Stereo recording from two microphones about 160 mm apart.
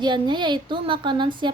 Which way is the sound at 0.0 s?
30° right (ahead or behind).